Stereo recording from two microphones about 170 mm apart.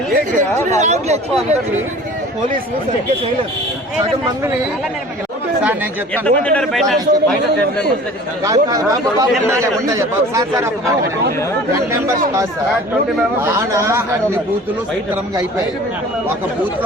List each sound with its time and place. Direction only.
0.3 s speech: 45° right (ahead or behind)
6.2 s speech: 5° left (ahead or behind)
8.4 s speech: 20° right (ahead or behind)
13.4 s speech: 15° right (ahead or behind)